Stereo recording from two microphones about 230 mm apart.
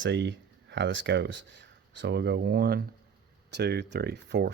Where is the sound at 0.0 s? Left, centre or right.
Right.